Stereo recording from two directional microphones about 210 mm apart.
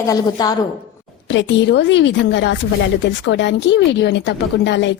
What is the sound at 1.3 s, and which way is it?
Speech, 60° left (ahead or behind).